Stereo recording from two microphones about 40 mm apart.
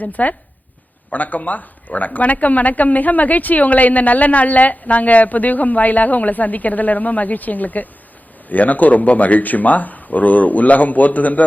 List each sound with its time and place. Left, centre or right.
0.0 s speech: left